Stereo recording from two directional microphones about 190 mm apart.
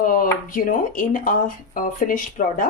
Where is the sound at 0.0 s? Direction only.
45° left (ahead or behind).